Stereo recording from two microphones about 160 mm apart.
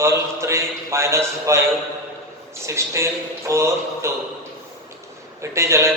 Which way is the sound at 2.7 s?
20° right (ahead or behind).